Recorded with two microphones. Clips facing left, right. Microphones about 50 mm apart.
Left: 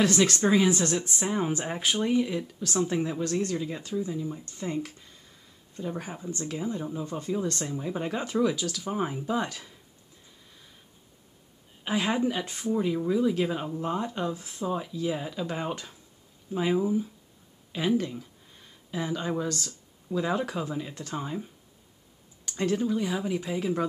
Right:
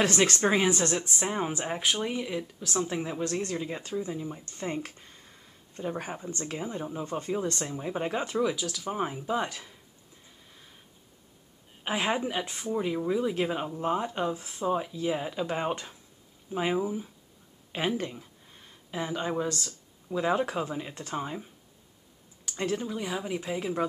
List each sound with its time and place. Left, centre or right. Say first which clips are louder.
0.0 s speech: left 1 dB; right
1.1 s speech: left 2 dB; centre
3.3 s speech: left 2 dB; right
4.5 s speech: left 1 dB; right
6.3 s speech: left 2 dB; right
6.6 s speech: left 3 dB; right
7.1 s speech: even; right
7.7 s speech: even; centre
11.8 s a woman's voice: left 1 dB; centre
12.2 s speech: left 3 dB; centre
17.7 s speech: left 3 dB; right
18.1 s a sound: left 5 dB; centre
19.6 s speech: left 1 dB; centre
22.6 s speech: left 4 dB; centre